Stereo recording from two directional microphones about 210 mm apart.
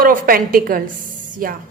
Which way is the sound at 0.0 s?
45° right (ahead or behind).